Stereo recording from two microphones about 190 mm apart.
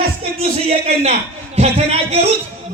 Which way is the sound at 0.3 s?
30° right (ahead or behind).